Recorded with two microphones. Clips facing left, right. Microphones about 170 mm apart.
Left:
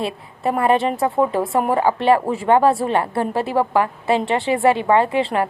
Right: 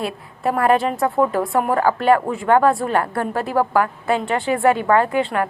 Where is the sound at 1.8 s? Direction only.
25° left (ahead or behind).